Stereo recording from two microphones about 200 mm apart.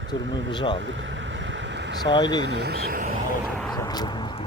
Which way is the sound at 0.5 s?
25° left (ahead or behind).